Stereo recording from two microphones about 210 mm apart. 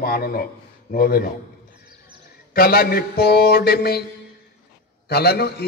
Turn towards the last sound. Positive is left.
turn(degrees=50)  # may be behind; listen again after turning